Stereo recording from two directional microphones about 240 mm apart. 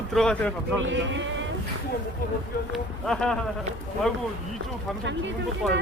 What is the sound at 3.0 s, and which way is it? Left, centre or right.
Speech, centre.